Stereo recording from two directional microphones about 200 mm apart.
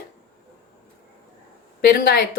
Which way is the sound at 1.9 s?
50° left (ahead or behind).